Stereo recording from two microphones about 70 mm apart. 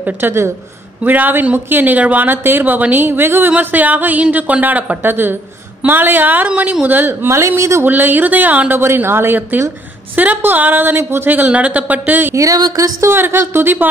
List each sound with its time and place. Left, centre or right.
0.0 s speech: right
7.2 s speech: right
7.8 s speech: right
12.4 s a sound: right
13.1 s speech: right